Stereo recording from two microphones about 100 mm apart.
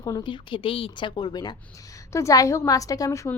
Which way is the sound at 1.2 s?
45° left (ahead or behind).